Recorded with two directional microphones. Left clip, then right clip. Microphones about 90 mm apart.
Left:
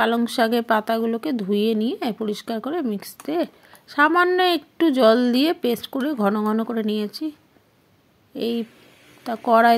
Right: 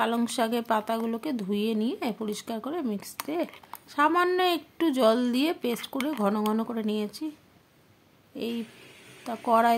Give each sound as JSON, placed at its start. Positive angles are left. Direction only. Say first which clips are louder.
{"t": 0.0, "sound": "speech", "louder": "left 7 dB", "side_deg": 40}
{"t": 8.4, "sound": "speech", "louder": "left 8 dB", "side_deg": 45}